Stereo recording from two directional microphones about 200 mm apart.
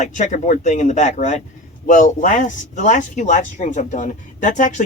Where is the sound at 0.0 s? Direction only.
35° left (ahead or behind).